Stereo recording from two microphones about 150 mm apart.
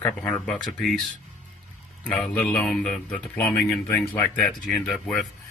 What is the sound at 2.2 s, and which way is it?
Speech, 5° left (ahead or behind).